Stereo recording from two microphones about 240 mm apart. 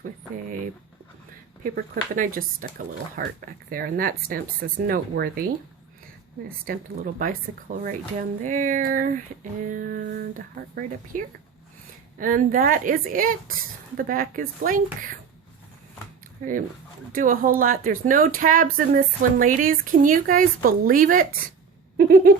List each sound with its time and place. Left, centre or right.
1.7 s speech: right
6.7 s speech: right
8.4 s speech: right
16.4 s speech: right
21.9 s a sound: right